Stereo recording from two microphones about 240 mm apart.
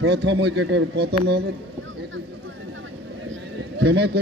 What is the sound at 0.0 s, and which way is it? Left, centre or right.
A man's voice, right.